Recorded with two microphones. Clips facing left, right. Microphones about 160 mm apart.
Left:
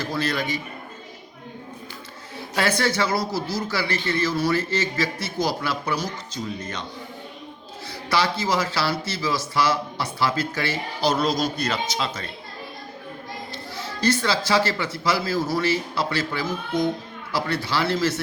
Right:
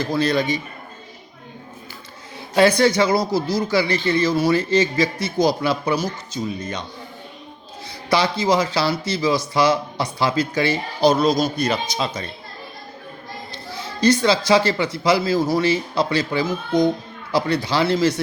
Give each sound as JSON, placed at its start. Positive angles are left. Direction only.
{"t": 0.2, "sound": "a man's voice", "side_deg": -20}
{"t": 2.6, "sound": "a man's voice", "side_deg": -15}
{"t": 8.1, "sound": "a man's voice", "side_deg": -20}
{"t": 14.0, "sound": "a man's voice", "side_deg": -15}